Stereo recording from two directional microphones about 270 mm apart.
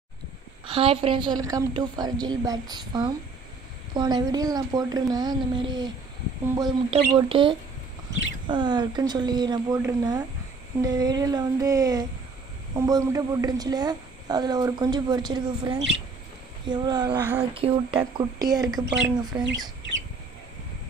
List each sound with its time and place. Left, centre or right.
0.7 s speech: centre